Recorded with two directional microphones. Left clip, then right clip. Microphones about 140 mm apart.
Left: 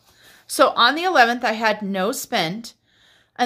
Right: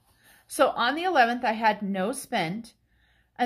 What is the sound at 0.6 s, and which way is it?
Speech, 30° left (ahead or behind).